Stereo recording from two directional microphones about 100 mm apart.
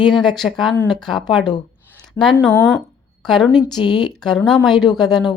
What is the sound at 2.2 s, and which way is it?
Speech, 30° left (ahead or behind).